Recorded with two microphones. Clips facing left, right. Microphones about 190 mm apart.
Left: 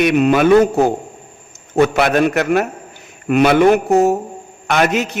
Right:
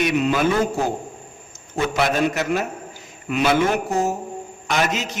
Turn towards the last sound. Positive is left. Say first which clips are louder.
# left 6 dB
turn(degrees=60)  # may be behind; listen again after turning